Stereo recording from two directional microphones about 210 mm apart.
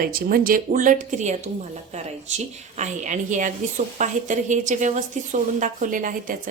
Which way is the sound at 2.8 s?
35° right (ahead or behind).